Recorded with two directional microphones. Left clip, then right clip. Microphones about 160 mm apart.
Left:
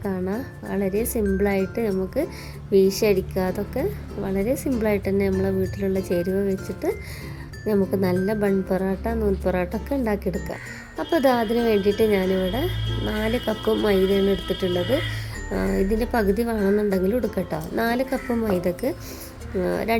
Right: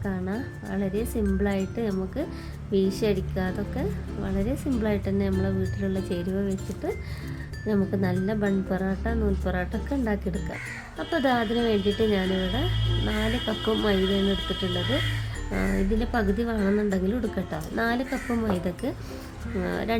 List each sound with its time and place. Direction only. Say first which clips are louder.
0.0 s speech: left 4 dB; 15° left (ahead or behind)
7.7 s speech: left 5 dB; 15° left (ahead or behind)